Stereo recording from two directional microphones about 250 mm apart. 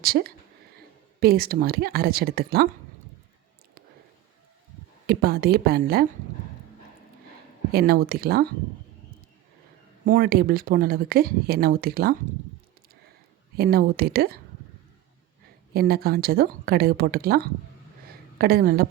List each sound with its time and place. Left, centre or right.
0.0 s speech: right
5.0 s speech: right
7.7 s speech: right
10.1 s speech: right
13.6 s speech: right
15.7 s speech: right